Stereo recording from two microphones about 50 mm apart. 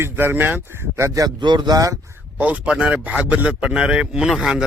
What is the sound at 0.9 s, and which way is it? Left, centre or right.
Speech, right.